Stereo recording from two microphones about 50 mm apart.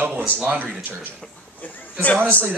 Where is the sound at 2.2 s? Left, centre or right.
Right.